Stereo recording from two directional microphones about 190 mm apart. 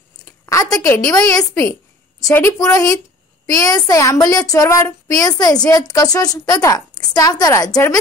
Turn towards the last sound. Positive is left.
turn(degrees=20)  # may be behind; listen again after turning